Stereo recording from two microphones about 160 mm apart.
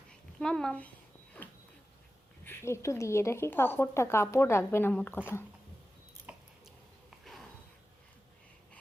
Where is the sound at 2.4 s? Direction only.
15° left (ahead or behind).